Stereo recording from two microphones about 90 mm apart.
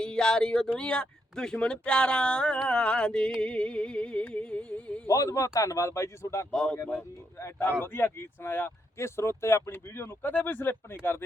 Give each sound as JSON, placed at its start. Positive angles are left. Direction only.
{"t": 0.0, "sound": "speech", "side_deg": 10}
{"t": 5.0, "sound": "speech", "side_deg": 40}
{"t": 6.5, "sound": "speech", "side_deg": 10}
{"t": 7.3, "sound": "speech", "side_deg": 30}